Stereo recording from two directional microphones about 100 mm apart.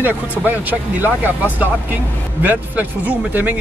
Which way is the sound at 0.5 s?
15° right (ahead or behind).